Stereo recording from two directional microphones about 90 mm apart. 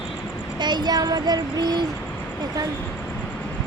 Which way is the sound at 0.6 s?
55° right (ahead or behind).